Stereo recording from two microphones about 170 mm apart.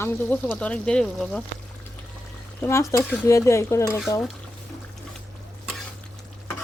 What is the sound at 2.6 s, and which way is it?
Speech, 15° left (ahead or behind).